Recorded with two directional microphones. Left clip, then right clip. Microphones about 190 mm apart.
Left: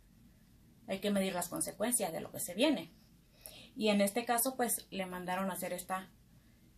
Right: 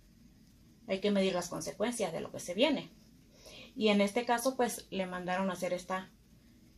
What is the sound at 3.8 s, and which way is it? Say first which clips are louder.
Speech: right 2 dB; 45° right (ahead or behind).